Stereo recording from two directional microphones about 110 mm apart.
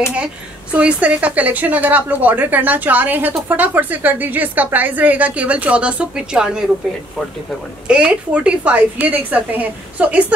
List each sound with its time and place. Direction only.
0.7 s a woman's voice: 10° right (ahead or behind)
7.9 s a woman's voice: 10° right (ahead or behind)